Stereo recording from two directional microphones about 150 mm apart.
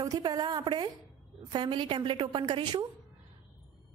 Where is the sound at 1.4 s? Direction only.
35° right (ahead or behind).